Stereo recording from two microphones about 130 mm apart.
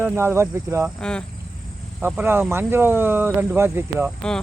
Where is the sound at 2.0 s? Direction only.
15° right (ahead or behind).